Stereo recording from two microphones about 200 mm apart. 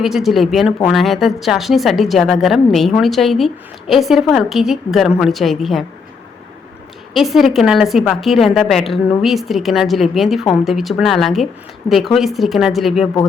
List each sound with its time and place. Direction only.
0.0 s a woman's voice: centre (ahead or behind)
7.1 s a woman's voice: centre (ahead or behind)